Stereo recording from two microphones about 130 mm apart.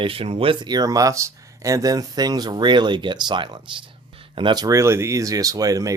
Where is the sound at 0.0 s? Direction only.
45° right (ahead or behind).